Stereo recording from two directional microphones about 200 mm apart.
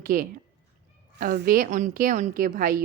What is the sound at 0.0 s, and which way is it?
A woman's voice, 45° right (ahead or behind).